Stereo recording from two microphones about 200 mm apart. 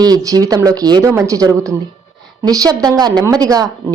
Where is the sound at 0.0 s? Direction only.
20° right (ahead or behind).